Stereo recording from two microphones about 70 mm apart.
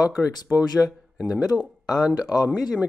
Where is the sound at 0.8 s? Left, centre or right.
Centre.